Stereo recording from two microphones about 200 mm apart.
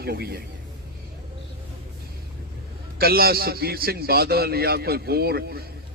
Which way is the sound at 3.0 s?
50° right (ahead or behind).